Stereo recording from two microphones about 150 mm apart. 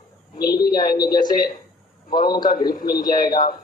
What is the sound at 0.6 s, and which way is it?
A man's voice, 75° left (ahead or behind).